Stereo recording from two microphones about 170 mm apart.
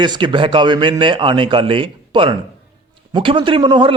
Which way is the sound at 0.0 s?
25° right (ahead or behind).